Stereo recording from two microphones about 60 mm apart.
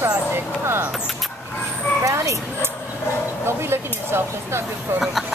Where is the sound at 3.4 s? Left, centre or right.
Right.